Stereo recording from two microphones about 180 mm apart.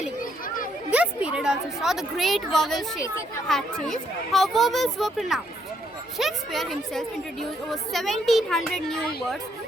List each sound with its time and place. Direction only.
0.2 s children playing: 50° left (ahead or behind)
0.9 s a woman's voice: 5° right (ahead or behind)